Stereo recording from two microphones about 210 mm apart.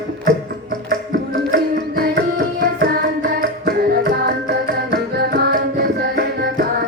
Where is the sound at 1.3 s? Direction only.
50° right (ahead or behind).